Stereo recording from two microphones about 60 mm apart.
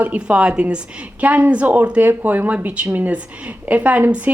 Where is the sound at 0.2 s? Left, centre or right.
Centre.